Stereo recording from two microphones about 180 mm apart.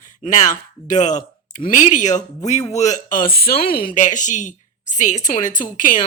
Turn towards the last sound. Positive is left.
turn(degrees=45)  # may be behind; listen again after turning